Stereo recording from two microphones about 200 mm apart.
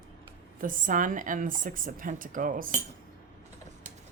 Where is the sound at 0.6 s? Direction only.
40° right (ahead or behind).